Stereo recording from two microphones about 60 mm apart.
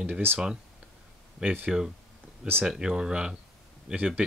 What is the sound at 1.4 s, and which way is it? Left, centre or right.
Speech, centre.